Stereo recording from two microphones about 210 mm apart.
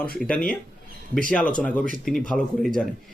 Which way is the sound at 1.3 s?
5° left (ahead or behind).